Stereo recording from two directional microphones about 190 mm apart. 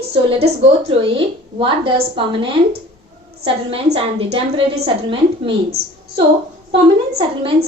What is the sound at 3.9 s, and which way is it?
A woman's voice, 30° right (ahead or behind).